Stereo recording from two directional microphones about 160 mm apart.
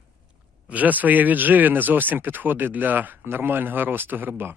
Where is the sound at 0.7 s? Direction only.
10° right (ahead or behind).